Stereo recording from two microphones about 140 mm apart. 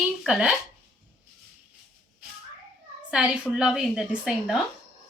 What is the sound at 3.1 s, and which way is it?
A woman's voice, 5° right (ahead or behind).